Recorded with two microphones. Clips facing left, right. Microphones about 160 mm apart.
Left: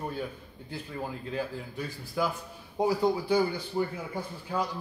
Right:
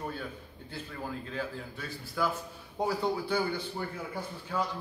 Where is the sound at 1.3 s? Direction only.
15° left (ahead or behind).